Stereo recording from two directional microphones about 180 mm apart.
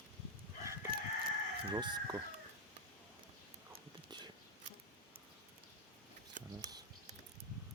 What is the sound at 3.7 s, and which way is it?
Whispering, 25° right (ahead or behind).